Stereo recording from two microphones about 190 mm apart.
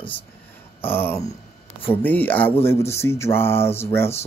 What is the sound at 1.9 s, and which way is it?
Speech, 10° left (ahead or behind).